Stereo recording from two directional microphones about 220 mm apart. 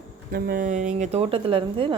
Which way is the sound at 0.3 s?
40° right (ahead or behind).